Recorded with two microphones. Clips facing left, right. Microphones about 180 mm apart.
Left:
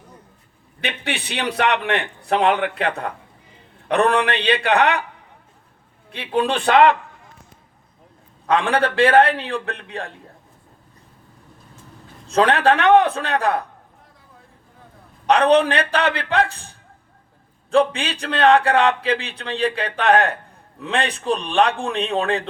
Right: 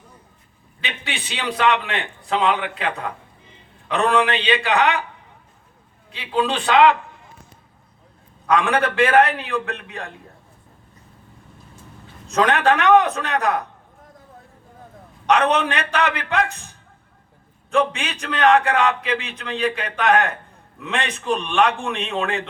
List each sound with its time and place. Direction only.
0.8 s a man's voice: 60° left (ahead or behind)
6.1 s a man's voice: 55° left (ahead or behind)
8.4 s speech: 30° left (ahead or behind)
12.3 s speech: 30° left (ahead or behind)
15.3 s speech: 35° left (ahead or behind)